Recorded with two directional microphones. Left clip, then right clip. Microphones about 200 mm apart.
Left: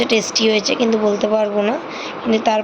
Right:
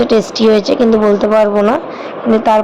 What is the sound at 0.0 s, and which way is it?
Speech, 30° right (ahead or behind).